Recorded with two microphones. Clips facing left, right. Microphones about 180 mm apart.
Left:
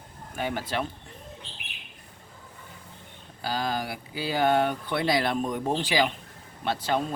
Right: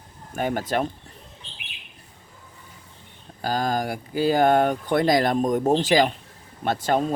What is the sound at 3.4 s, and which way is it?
Speech, 45° right (ahead or behind).